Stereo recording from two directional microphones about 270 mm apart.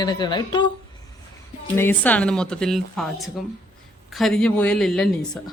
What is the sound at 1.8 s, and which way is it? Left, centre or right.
A woman's voice, centre.